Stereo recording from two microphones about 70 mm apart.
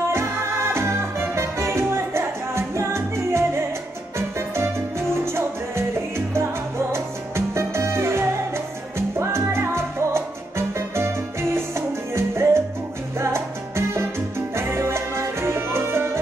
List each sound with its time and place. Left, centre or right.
0.1 s music: right